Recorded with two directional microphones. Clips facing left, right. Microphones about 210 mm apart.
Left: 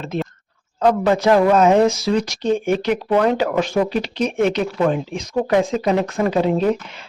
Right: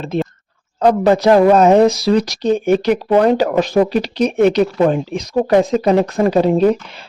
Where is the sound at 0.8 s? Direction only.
40° right (ahead or behind).